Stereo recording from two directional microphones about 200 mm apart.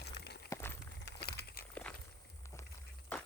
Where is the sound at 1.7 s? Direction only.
5° left (ahead or behind).